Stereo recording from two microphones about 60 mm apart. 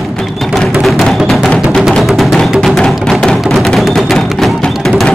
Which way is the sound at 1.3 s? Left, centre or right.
Centre.